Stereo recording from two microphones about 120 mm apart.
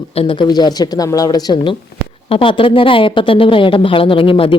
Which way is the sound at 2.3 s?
50° left (ahead or behind).